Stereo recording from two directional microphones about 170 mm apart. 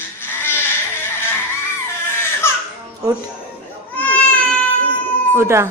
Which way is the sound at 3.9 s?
10° left (ahead or behind).